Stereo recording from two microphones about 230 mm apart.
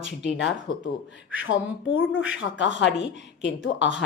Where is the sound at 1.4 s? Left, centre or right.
Left.